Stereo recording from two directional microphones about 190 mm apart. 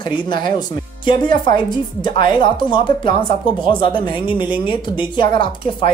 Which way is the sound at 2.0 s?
25° left (ahead or behind).